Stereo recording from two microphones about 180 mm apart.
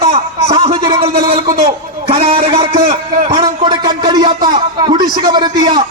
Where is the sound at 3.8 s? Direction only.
25° right (ahead or behind).